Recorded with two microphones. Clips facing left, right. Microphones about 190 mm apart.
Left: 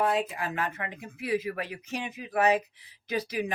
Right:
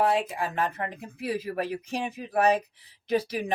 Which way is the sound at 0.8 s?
40° right (ahead or behind).